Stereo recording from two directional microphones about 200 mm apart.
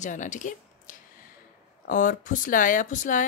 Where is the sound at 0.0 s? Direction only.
40° left (ahead or behind).